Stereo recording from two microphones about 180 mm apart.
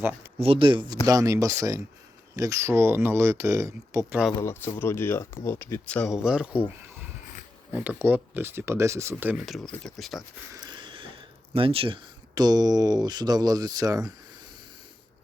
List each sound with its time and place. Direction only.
0.3 s speech: 30° right (ahead or behind)
4.4 s speech: 15° left (ahead or behind); by 6.6 s 5° right (ahead or behind)
7.7 s speech: 10° right (ahead or behind)
10.5 s a sound: 25° right (ahead or behind)
11.5 s speech: 30° right (ahead or behind)